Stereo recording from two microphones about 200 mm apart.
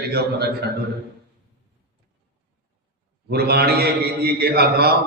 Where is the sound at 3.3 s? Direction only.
50° right (ahead or behind).